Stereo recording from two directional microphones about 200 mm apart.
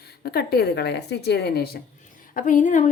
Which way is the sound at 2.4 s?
40° left (ahead or behind).